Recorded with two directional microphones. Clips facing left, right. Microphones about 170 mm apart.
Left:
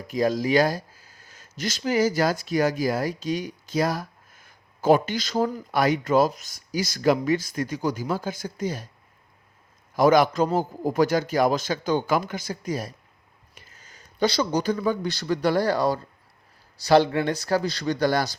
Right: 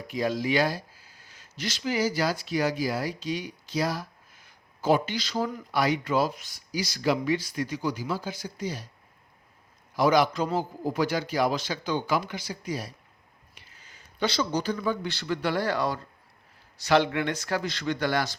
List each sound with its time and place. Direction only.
0.1 s speech: 40° left (ahead or behind)
9.9 s speech: 50° left (ahead or behind)